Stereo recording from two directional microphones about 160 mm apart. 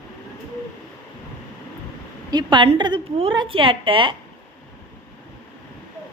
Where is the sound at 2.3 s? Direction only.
25° right (ahead or behind).